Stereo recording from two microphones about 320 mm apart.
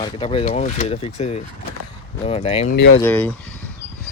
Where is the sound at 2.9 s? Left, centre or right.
Centre.